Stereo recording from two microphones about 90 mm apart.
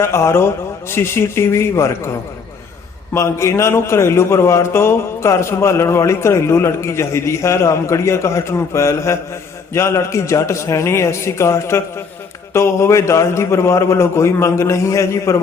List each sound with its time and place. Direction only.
0.0 s a man's voice: 30° left (ahead or behind)